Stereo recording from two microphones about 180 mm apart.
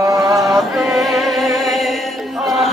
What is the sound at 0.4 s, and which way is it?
Music, 5° right (ahead or behind).